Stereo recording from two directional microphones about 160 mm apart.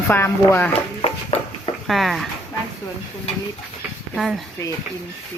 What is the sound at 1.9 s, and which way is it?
Speech, centre (ahead or behind).